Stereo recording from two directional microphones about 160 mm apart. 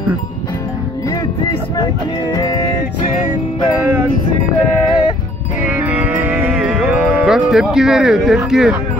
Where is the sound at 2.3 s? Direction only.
25° left (ahead or behind).